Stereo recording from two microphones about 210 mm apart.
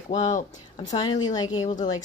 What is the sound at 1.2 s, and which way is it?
Speech, 20° left (ahead or behind).